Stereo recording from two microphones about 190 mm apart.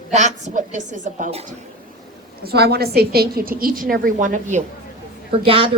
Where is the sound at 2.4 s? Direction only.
55° right (ahead or behind); by 4.6 s 40° right (ahead or behind).